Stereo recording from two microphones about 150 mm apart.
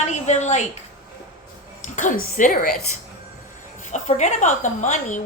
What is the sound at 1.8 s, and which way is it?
Speech, 55° left (ahead or behind).